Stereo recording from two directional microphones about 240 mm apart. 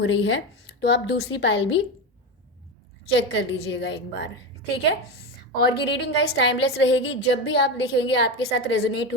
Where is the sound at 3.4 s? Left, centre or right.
Left.